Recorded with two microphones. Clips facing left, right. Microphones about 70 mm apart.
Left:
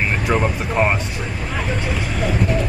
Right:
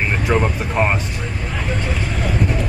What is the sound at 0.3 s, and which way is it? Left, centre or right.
Speech, centre.